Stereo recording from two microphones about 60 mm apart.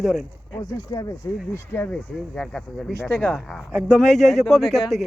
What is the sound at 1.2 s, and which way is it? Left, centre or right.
Speech, left.